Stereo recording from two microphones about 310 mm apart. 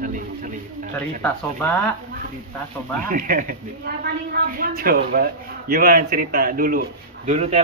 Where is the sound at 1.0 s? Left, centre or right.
Centre.